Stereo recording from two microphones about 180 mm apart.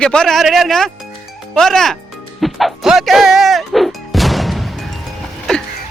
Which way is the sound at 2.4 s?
Centre (ahead or behind).